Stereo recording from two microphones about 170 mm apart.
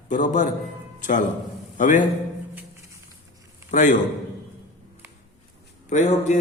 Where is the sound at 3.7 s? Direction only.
45° left (ahead or behind).